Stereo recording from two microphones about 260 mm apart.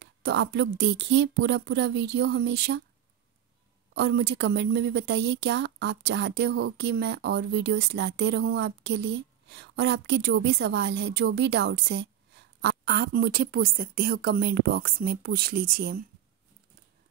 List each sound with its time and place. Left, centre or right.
0.0 s a woman's voice: right
3.9 s a woman's voice: right